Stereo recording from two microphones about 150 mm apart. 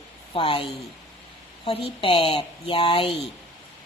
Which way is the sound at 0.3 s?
35° left (ahead or behind).